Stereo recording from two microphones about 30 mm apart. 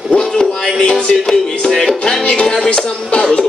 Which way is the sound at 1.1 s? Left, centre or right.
Centre.